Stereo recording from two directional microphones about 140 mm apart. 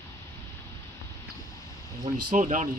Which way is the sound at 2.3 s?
65° right (ahead or behind).